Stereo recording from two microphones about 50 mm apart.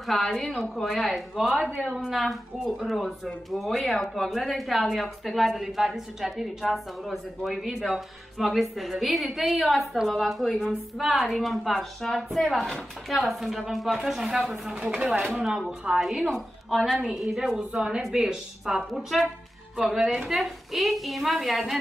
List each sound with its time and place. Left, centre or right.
0.0 s a woman's voice: centre
14.9 s speech: centre
15.1 s speech: right
16.0 s speech: centre
16.3 s a woman's voice: centre